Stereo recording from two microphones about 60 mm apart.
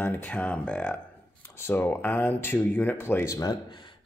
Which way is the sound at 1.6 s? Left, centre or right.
Left.